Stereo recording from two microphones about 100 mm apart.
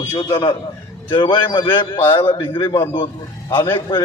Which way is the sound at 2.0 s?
25° left (ahead or behind).